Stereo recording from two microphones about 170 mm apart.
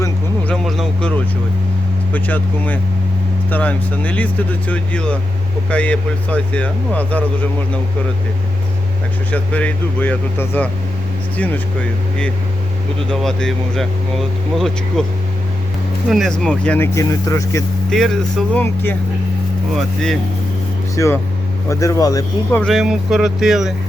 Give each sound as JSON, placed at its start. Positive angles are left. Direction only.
{"t": 0.4, "sound": "speech", "side_deg": 0}
{"t": 9.3, "sound": "speech", "side_deg": 10}
{"t": 16.0, "sound": "speech", "side_deg": 0}
{"t": 17.9, "sound": "speech", "side_deg": 0}
{"t": 20.9, "sound": "speech", "side_deg": 15}
{"t": 22.6, "sound": "speech", "side_deg": 0}